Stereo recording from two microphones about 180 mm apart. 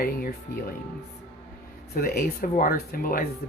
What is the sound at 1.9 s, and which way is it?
Speech, 55° left (ahead or behind).